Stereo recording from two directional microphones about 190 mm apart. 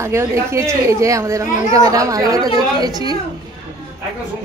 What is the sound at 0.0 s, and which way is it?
A woman's voice, 15° right (ahead or behind).